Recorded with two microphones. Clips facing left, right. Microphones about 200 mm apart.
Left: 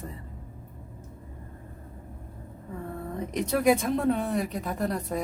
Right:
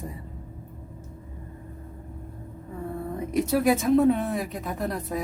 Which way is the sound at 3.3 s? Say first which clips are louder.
Right 1 dB; 5° right (ahead or behind).